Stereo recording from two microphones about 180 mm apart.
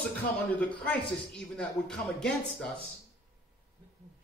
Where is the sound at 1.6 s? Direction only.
5° left (ahead or behind).